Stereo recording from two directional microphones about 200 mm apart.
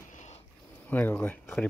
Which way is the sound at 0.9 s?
10° left (ahead or behind).